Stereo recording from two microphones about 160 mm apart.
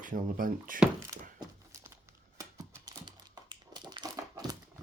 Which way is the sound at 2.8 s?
25° right (ahead or behind).